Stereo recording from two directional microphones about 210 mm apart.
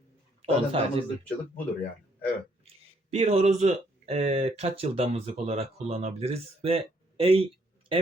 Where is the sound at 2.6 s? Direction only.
30° right (ahead or behind).